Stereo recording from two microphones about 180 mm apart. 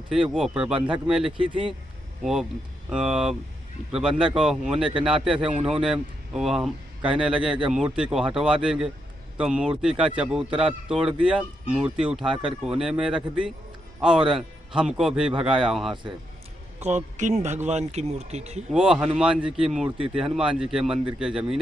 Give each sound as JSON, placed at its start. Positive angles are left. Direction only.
{"t": 0.1, "sound": "speech", "side_deg": -5}
{"t": 2.9, "sound": "speech", "side_deg": -5}
{"t": 5.4, "sound": "a man's voice", "side_deg": -30}
{"t": 5.7, "sound": "speech", "side_deg": -5}
{"t": 16.8, "sound": "speech", "side_deg": -40}
{"t": 18.7, "sound": "speech", "side_deg": -5}